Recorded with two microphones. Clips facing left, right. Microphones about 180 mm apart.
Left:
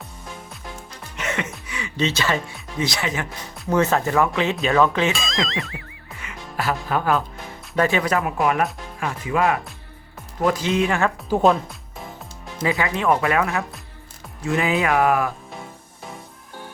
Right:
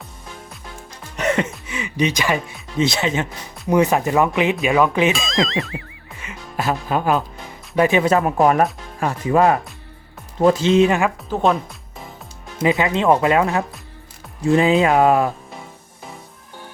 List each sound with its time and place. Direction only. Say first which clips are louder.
1.1 s music: right 7 dB; 35° right (ahead or behind)
1.6 s speech: right 3 dB; 20° right (ahead or behind)
2.8 s speech: right 5 dB; 25° right (ahead or behind)
3.7 s speech: right 3 dB; 15° right (ahead or behind)
5.1 s music: right 5 dB; centre (ahead or behind)
6.1 s music: right 2 dB; 20° right (ahead or behind)
7.8 s speech: right 4 dB; 20° right (ahead or behind)
8.2 s speech: right 5 dB; 35° right (ahead or behind)
10.4 s speech: right 6 dB; 25° right (ahead or behind)
12.5 s speech: right 5 dB; 20° right (ahead or behind)